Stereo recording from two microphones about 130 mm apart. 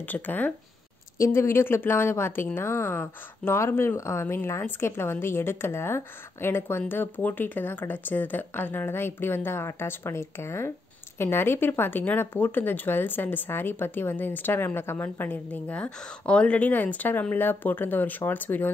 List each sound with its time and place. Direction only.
0.0 s speech: 15° left (ahead or behind)